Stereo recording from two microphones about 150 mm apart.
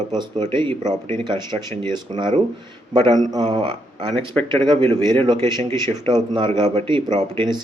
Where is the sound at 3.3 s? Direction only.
30° right (ahead or behind).